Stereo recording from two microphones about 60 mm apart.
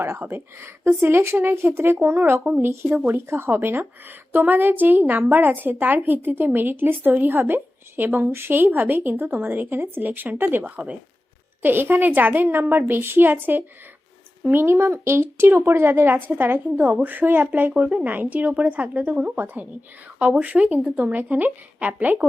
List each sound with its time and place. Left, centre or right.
0.0 s a woman's voice: right